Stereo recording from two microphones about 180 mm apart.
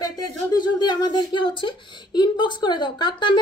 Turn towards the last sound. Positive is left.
turn(degrees=25)  # may be behind; listen again after turning